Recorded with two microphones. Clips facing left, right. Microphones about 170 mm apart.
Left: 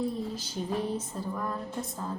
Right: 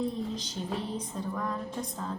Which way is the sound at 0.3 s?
10° left (ahead or behind).